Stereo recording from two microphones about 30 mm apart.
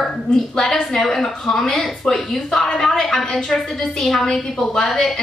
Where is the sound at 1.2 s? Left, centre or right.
Left.